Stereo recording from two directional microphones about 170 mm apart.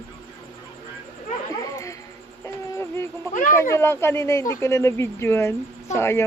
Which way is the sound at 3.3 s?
50° left (ahead or behind).